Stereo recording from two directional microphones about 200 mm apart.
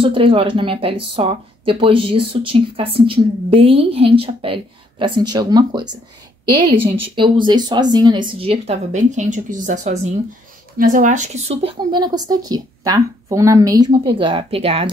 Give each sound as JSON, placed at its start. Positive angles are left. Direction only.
{"t": 0.0, "sound": "speech", "side_deg": -25}